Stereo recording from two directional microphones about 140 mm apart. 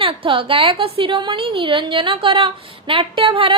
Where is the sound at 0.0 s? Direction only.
40° right (ahead or behind).